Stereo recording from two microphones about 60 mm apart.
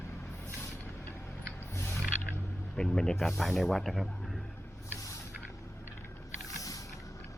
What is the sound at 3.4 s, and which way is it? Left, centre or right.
Speech, centre.